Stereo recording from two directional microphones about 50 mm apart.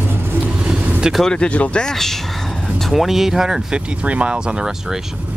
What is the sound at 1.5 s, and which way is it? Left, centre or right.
Speech, left.